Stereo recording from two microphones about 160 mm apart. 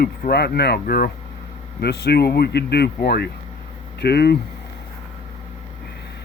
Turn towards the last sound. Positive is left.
turn(degrees=90)